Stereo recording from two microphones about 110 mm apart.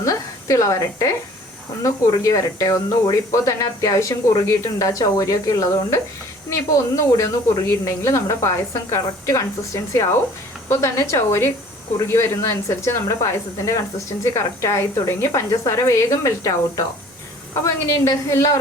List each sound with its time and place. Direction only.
0.0 s a woman's voice: 30° left (ahead or behind)